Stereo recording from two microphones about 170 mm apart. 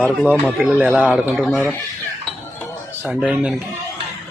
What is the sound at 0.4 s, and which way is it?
Speech, 5° right (ahead or behind).